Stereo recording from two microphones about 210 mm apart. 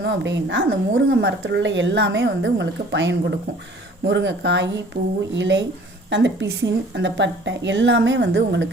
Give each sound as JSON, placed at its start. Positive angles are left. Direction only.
{"t": 0.0, "sound": "speech", "side_deg": -60}
{"t": 4.9, "sound": "speech", "side_deg": -50}
{"t": 5.3, "sound": "speech", "side_deg": -60}